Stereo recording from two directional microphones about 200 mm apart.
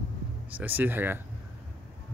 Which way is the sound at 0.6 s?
10° right (ahead or behind).